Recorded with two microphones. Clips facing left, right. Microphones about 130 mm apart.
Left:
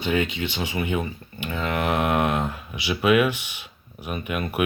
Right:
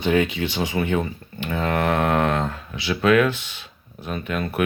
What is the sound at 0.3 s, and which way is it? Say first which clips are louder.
Speech: right 3 dB; 20° left (ahead or behind).